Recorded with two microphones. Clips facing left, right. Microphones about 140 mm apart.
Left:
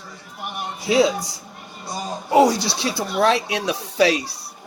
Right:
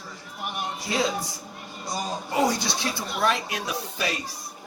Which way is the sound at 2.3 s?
80° left.